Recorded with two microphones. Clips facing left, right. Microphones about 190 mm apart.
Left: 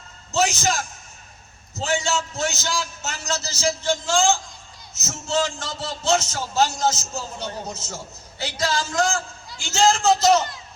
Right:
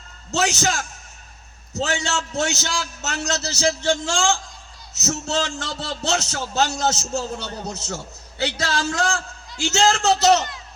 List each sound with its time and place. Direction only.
0.3 s a man's voice: 75° right (ahead or behind)